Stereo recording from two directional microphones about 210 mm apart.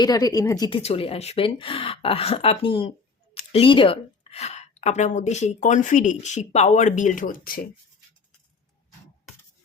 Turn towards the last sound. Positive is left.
turn(degrees=45)  # may be behind; listen again after turning